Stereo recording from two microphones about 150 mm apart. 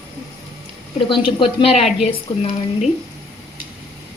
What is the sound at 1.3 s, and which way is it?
Speech, 35° left (ahead or behind).